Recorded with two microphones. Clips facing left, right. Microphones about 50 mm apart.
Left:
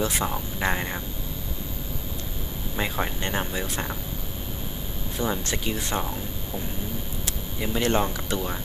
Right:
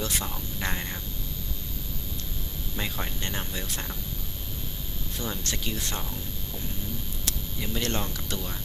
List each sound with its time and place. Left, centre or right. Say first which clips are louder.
0.0 s speech: left 6 dB; centre
2.7 s speech: left 6 dB; centre
5.1 s speech: left 6 dB; centre
7.3 s speech: left 3 dB; centre